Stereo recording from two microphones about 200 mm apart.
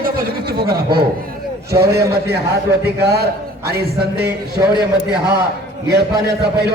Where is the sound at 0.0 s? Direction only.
50° right (ahead or behind).